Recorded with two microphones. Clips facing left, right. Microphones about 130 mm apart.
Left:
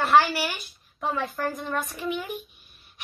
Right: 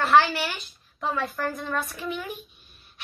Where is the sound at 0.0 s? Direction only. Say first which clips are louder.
Even; 10° left (ahead or behind).